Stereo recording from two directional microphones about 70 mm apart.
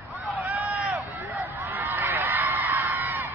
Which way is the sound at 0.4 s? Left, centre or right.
Right.